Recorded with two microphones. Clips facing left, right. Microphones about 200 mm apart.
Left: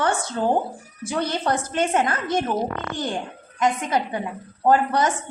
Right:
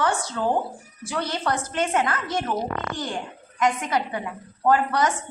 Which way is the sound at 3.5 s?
25° left (ahead or behind).